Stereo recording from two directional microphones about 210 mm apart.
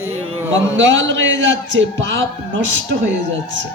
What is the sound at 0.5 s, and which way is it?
A woman's voice, 65° right (ahead or behind).